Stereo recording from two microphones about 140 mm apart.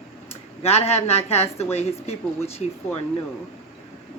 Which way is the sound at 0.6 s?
50° left (ahead or behind).